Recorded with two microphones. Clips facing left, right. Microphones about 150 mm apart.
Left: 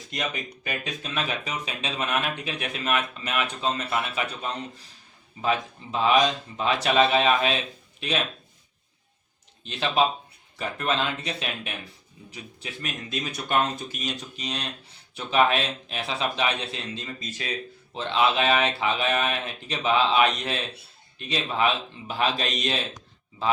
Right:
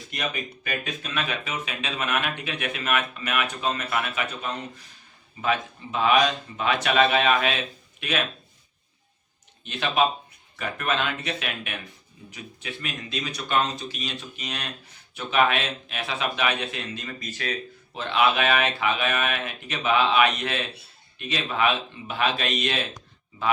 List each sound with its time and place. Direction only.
0.1 s speech: 20° left (ahead or behind)
5.4 s speech: 35° left (ahead or behind)
9.6 s speech: 30° left (ahead or behind)